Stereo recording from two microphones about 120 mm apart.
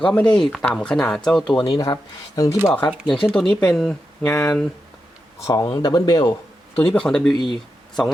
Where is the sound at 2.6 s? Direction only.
15° left (ahead or behind).